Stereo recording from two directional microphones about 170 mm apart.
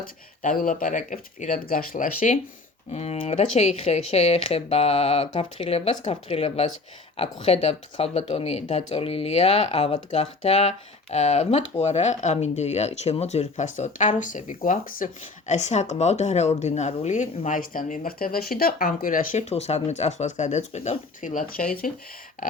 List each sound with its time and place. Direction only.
0.0 s speech: 55° left (ahead or behind)
2.9 s speech: 40° left (ahead or behind); by 21.9 s 55° left (ahead or behind)